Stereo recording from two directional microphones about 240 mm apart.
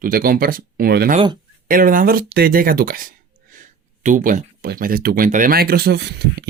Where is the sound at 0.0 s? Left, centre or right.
Right.